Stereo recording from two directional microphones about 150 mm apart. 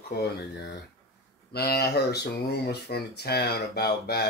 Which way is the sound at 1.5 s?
90° left.